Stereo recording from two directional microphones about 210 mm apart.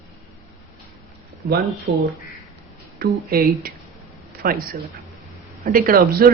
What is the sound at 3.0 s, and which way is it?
Speech, 45° right (ahead or behind).